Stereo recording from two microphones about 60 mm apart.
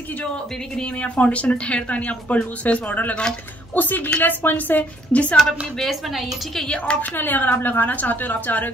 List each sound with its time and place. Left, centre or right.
0.7 s speech: centre
5.8 s a woman's voice: centre
6.5 s a woman's voice: centre
7.0 s speech: left